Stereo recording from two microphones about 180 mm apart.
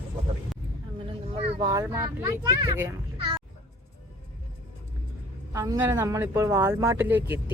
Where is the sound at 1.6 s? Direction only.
20° right (ahead or behind).